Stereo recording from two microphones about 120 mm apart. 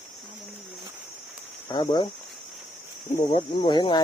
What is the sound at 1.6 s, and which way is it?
Speech, 40° left (ahead or behind).